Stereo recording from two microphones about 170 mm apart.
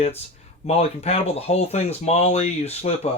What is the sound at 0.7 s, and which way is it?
Speech, 35° left (ahead or behind).